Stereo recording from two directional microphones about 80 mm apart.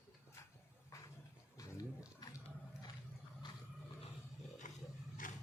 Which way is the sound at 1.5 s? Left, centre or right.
Left.